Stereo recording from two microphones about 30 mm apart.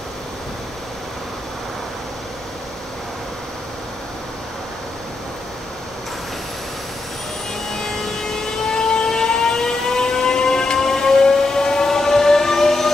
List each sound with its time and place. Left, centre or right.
7.7 s vehicle: centre